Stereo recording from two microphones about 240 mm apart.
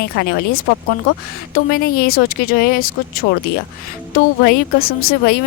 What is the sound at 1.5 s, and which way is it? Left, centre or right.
Speech, left.